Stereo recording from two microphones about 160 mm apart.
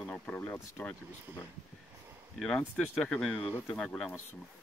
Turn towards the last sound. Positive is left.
turn(degrees=5)  # may be behind; listen again after turning